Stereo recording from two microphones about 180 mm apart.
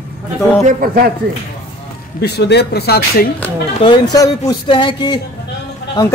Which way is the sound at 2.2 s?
65° left (ahead or behind).